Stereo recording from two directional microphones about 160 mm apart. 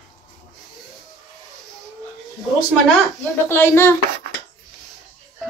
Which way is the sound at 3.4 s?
15° left (ahead or behind).